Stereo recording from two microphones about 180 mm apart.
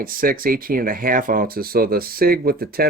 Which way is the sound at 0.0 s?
50° right (ahead or behind).